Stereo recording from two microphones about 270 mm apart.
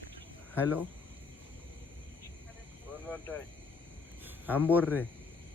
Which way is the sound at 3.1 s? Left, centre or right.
Centre.